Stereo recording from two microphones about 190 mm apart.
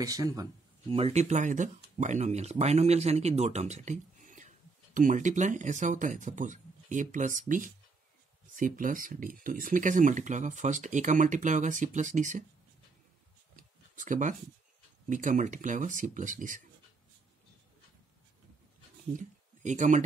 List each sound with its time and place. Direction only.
0.0 s speech: 20° right (ahead or behind)
0.9 s speech: 35° right (ahead or behind)
13.6 s a sound: 45° right (ahead or behind)
15.0 s speech: 40° right (ahead or behind)
19.1 s speech: 40° right (ahead or behind)